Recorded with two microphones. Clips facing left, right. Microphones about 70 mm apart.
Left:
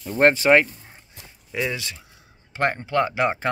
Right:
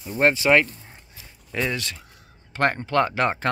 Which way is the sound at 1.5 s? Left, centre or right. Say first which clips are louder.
Even; centre.